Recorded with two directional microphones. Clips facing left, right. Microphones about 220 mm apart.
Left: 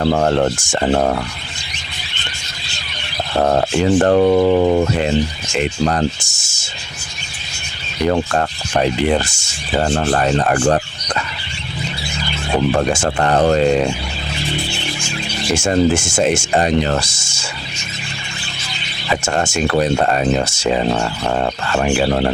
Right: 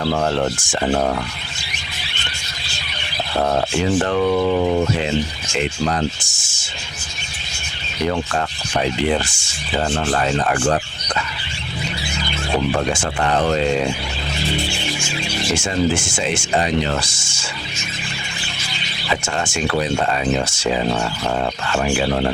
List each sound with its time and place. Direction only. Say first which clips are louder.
0.0 s speech: left 4 dB; 45° left (ahead or behind)
3.4 s speech: left 4 dB; 45° left (ahead or behind)
8.1 s speech: left 5 dB; 45° left (ahead or behind)
12.9 s speech: left 4 dB; 45° left (ahead or behind)
15.5 s speech: left 5 dB; 45° left (ahead or behind)
19.1 s speech: left 4 dB; 45° left (ahead or behind)